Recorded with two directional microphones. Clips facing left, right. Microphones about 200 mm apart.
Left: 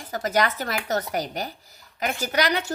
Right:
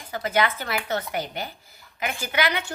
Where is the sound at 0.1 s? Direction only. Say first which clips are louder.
Left 1 dB; 40° left (ahead or behind).